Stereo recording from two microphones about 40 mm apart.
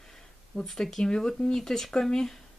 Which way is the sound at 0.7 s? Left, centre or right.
Centre.